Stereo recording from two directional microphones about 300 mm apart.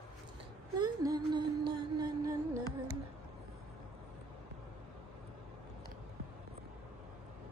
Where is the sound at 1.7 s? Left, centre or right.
Centre.